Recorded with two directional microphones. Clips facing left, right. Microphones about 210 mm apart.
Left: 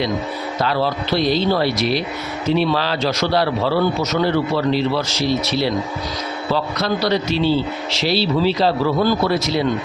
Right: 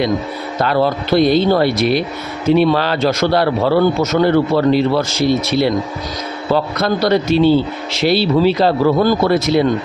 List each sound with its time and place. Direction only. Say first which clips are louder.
0.6 s a man's voice: right 5 dB; 50° right (ahead or behind)